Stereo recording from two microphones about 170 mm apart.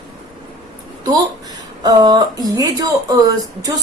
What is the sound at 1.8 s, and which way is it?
Speech, 25° right (ahead or behind).